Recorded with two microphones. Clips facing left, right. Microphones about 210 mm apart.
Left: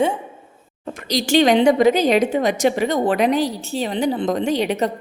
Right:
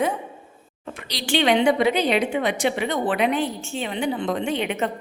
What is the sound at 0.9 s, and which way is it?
A woman's voice, 40° left (ahead or behind).